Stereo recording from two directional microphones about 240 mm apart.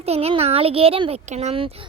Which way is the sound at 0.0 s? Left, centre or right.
Right.